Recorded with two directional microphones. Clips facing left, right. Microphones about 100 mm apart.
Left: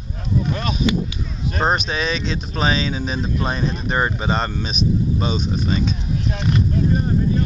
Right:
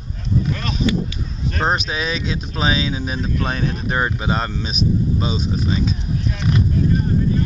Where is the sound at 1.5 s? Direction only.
10° left (ahead or behind).